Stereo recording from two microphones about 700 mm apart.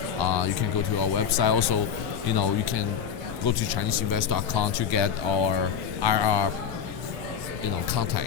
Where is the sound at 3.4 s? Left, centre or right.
Left.